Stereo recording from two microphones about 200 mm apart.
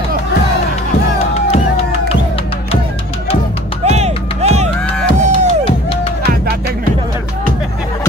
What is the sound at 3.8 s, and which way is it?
Music, 35° right (ahead or behind).